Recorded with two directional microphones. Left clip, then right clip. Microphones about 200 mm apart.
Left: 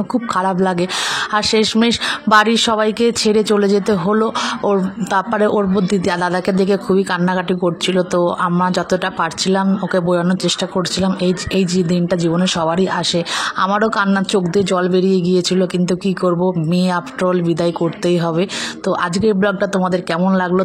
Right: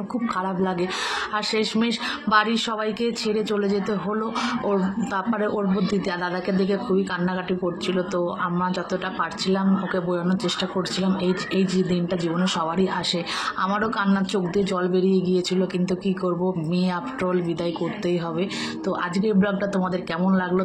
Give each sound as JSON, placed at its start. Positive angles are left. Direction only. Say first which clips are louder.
{"t": 0.1, "sound": "speech", "louder": "left 9 dB", "side_deg": 55}
{"t": 11.5, "sound": "speech", "louder": "left 6 dB", "side_deg": 55}